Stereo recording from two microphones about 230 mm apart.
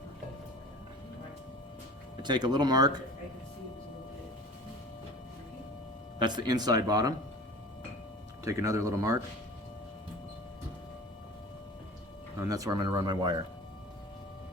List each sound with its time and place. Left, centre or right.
2.2 s speech: centre
6.1 s speech: centre
8.4 s speech: centre
12.5 s speech: centre